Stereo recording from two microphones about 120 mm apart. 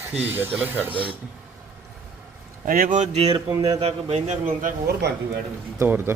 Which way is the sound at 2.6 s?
90° right.